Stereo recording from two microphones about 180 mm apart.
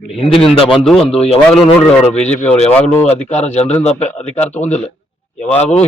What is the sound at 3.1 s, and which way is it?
A man's voice, 40° left (ahead or behind).